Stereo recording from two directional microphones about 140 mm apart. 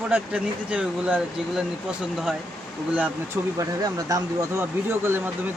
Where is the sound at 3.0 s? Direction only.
20° right (ahead or behind).